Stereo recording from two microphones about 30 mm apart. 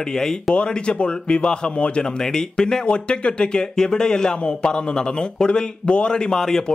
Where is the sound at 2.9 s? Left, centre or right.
Left.